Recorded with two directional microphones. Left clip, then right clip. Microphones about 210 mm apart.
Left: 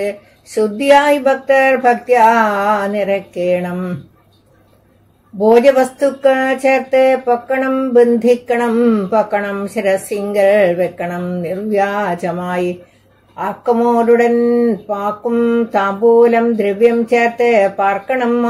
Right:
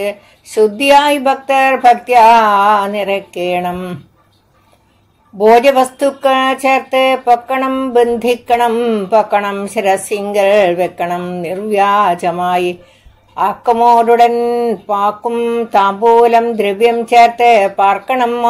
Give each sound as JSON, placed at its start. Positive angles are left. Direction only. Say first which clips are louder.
{"t": 0.6, "sound": "music", "louder": "right 2 dB", "side_deg": -25}
{"t": 5.8, "sound": "music", "louder": "right 1 dB", "side_deg": -20}